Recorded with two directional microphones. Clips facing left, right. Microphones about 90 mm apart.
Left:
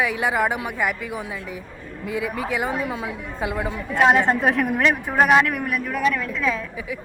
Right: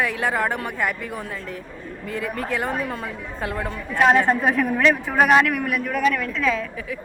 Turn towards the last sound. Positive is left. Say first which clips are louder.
# right 1 dB
turn(degrees=10)  # may be behind; listen again after turning